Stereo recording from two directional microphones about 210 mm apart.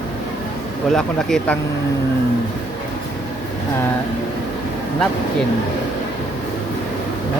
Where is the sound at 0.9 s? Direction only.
Centre (ahead or behind).